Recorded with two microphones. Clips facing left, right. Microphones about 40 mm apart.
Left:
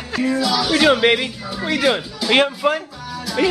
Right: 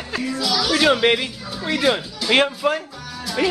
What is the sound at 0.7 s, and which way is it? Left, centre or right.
Speech, centre.